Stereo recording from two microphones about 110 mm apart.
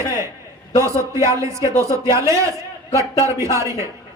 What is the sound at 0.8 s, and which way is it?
A man's voice, 25° right (ahead or behind).